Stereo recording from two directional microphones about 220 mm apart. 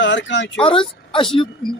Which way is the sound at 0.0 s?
55° left (ahead or behind).